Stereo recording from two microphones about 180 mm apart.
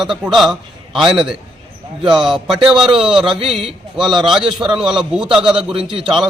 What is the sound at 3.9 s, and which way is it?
A man's voice, centre (ahead or behind).